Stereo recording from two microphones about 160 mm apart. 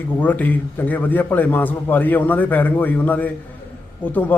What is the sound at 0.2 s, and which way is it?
A man's voice, 10° left (ahead or behind).